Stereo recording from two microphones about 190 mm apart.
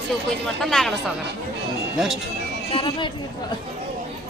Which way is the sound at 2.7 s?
25° left (ahead or behind).